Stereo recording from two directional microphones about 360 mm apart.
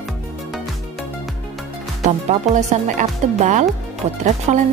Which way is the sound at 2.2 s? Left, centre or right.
Centre.